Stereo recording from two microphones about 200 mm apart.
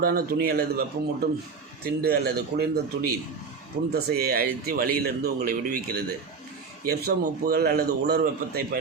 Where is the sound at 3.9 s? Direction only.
50° right (ahead or behind).